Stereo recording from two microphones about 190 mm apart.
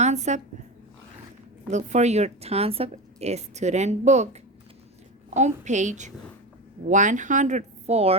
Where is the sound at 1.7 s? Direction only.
35° right (ahead or behind).